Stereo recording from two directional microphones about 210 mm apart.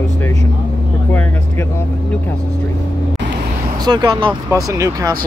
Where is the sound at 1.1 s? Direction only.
10° left (ahead or behind).